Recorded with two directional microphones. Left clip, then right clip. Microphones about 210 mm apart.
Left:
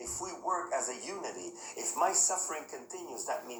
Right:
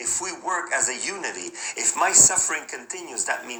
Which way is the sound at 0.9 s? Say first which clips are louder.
Right 11 dB; 15° right (ahead or behind).